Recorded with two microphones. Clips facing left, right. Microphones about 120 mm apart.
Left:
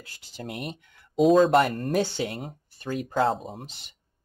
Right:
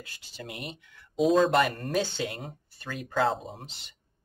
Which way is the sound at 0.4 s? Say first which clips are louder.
Left 5 dB; 40° left (ahead or behind).